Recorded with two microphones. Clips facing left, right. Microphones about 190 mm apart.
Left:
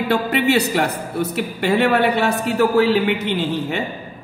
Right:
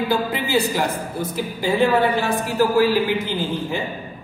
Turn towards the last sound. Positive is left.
turn(degrees=70)  # may be behind; listen again after turning